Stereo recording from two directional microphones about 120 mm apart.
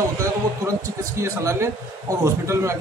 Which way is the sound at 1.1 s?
25° right (ahead or behind).